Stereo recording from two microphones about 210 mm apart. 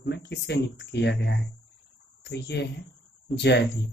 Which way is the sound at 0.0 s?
50° left (ahead or behind).